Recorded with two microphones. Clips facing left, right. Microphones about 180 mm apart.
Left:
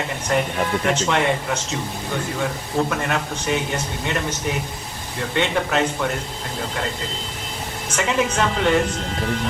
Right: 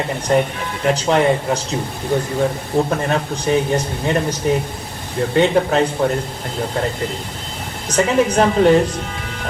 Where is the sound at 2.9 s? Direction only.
35° right (ahead or behind).